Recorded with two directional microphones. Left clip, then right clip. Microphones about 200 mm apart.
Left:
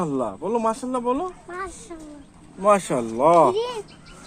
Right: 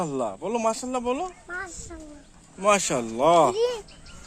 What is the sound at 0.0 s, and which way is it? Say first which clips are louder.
Speech: left 2 dB; 45° right (ahead or behind).